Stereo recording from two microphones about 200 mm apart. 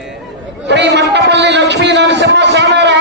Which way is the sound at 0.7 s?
60° right (ahead or behind).